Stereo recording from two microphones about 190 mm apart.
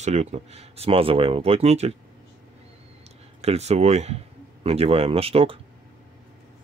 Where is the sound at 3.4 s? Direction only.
35° right (ahead or behind).